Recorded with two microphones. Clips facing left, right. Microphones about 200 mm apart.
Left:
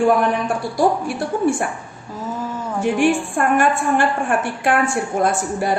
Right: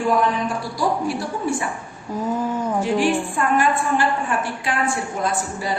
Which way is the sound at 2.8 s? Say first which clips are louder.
Left 5 dB; 55° left (ahead or behind).